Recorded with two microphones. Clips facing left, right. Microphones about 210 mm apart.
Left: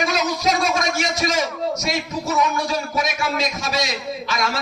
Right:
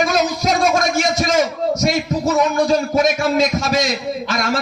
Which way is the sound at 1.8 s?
50° right (ahead or behind).